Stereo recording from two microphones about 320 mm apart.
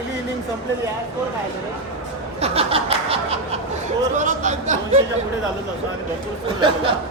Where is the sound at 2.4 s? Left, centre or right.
Centre.